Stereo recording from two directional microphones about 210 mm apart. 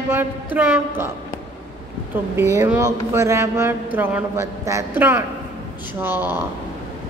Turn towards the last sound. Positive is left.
turn(degrees=-10)  # may be behind; listen again after turning